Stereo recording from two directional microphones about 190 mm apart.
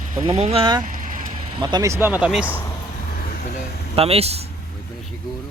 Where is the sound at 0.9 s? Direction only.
45° right (ahead or behind).